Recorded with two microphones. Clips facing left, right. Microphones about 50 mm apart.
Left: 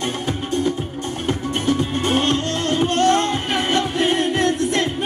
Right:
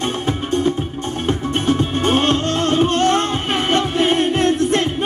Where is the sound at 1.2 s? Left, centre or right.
Right.